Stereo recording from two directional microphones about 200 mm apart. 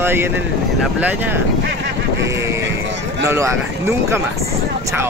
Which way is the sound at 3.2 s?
15° right (ahead or behind).